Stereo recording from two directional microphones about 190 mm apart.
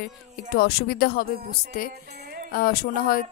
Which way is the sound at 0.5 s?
55° left (ahead or behind).